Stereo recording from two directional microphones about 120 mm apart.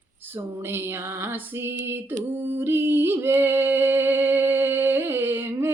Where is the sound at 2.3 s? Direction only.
20° right (ahead or behind).